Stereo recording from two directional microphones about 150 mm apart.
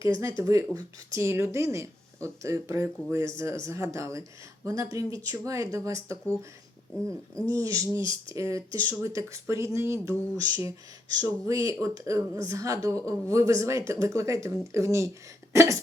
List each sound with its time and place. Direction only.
0.0 s speech: 25° right (ahead or behind)
7.7 s speech: 20° right (ahead or behind)